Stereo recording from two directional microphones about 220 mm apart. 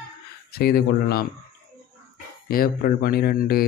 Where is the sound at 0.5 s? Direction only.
45° left (ahead or behind).